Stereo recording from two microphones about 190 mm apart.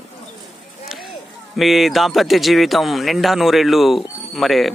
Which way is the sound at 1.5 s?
Centre (ahead or behind).